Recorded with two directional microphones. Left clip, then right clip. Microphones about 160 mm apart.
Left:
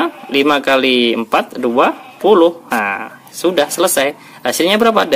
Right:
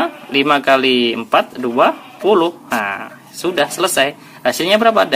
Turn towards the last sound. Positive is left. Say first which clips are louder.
# even
turn(degrees=50)  # may be behind; listen again after turning